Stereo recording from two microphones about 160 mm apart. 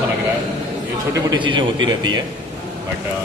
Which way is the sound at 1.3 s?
30° right (ahead or behind).